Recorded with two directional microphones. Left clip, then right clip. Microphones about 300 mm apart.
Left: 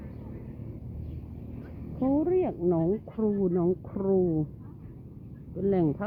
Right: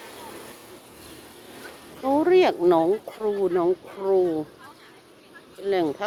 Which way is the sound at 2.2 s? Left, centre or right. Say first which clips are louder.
Right 11 dB; right.